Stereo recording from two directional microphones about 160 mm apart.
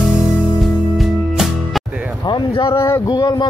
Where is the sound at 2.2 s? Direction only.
30° left (ahead or behind).